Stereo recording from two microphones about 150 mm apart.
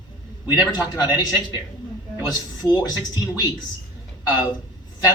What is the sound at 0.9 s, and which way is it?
A man's voice, 30° left (ahead or behind).